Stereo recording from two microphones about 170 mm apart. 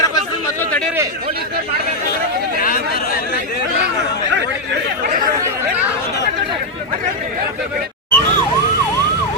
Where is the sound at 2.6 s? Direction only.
60° left (ahead or behind).